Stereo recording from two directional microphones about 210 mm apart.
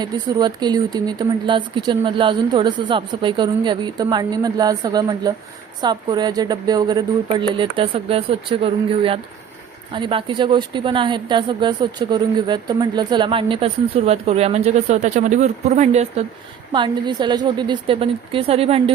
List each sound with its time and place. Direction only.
0.0 s a woman's voice: 20° right (ahead or behind)
16.7 s a woman's voice: 20° right (ahead or behind)